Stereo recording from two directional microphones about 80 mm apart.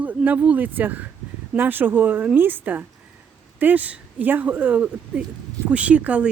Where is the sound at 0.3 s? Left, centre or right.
Centre.